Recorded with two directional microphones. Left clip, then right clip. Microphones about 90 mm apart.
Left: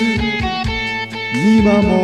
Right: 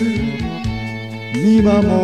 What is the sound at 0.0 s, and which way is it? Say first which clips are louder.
Music: left 3 dB; 50° left (ahead or behind).